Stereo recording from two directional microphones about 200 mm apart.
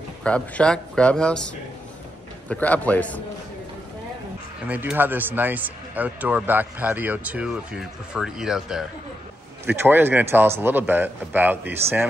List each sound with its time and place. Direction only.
0.2 s speech: 5° left (ahead or behind)
2.5 s a man's voice: 5° left (ahead or behind)
4.6 s speech: 10° right (ahead or behind)